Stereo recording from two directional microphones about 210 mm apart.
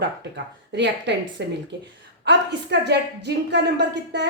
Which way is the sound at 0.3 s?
55° right (ahead or behind).